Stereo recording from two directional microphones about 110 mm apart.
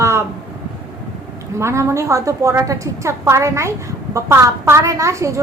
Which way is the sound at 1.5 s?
25° right (ahead or behind).